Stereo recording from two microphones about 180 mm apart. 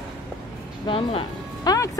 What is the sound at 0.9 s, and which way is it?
Speech, 30° left (ahead or behind).